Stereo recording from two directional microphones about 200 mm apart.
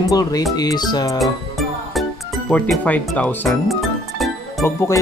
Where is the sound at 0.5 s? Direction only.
20° left (ahead or behind).